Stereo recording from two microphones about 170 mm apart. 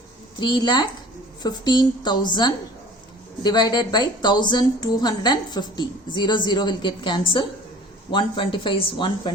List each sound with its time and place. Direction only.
0.3 s a woman's voice: 25° left (ahead or behind)
3.4 s a woman's voice: 25° left (ahead or behind)